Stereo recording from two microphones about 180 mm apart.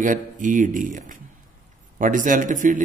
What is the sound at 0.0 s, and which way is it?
A man's voice, 45° right (ahead or behind).